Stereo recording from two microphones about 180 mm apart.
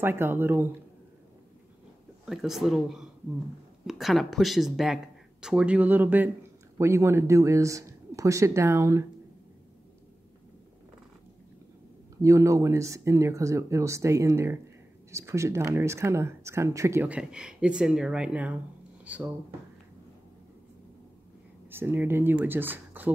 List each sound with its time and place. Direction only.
0.0 s speech: 10° right (ahead or behind)
2.2 s speech: centre (ahead or behind)
12.2 s speech: 15° right (ahead or behind)
21.6 s speech: 10° right (ahead or behind)